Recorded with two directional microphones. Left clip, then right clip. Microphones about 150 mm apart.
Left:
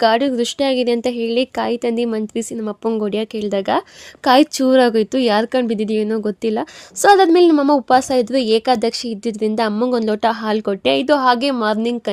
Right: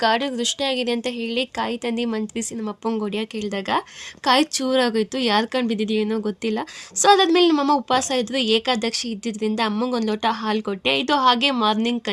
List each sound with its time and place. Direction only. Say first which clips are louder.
0.0 s a woman's voice: left 5 dB; 50° left (ahead or behind)